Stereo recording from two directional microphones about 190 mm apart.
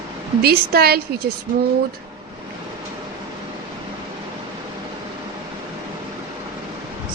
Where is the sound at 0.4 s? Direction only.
55° right (ahead or behind).